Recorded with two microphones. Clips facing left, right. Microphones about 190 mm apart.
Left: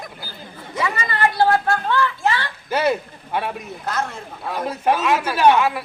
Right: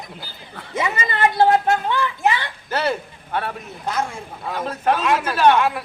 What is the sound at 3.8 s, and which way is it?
Speech, 10° right (ahead or behind).